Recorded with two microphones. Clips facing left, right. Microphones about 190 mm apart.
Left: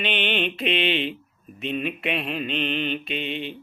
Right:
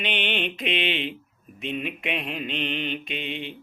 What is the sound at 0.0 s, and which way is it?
Mantra, 15° right (ahead or behind).